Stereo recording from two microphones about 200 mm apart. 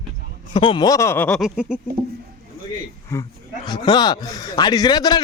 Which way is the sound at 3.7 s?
20° left (ahead or behind).